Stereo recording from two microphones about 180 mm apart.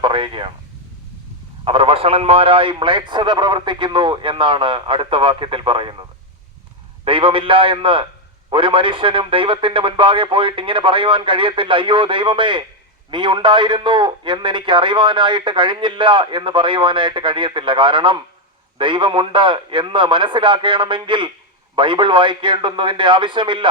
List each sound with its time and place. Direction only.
0.0 s speech: 25° right (ahead or behind)
1.6 s a man's voice: 30° right (ahead or behind)